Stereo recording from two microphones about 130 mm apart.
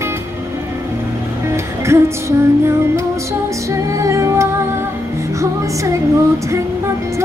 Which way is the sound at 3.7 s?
25° right (ahead or behind).